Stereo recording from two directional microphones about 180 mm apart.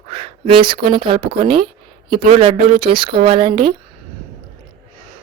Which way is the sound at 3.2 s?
30° right (ahead or behind).